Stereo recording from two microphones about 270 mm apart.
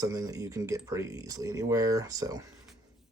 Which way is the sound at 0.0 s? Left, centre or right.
Centre.